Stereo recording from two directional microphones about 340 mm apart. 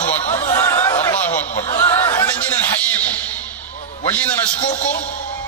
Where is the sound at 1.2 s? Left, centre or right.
Centre.